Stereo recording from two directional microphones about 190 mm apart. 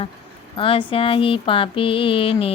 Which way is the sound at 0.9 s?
30° left (ahead or behind).